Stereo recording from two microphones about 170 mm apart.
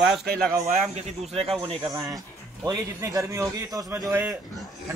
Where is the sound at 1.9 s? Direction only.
20° right (ahead or behind).